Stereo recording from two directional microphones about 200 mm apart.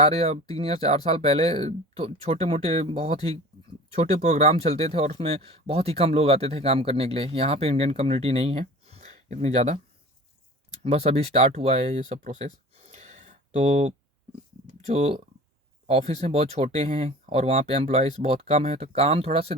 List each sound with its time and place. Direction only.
0.0 s speech: 30° right (ahead or behind)
10.8 s speech: 30° right (ahead or behind)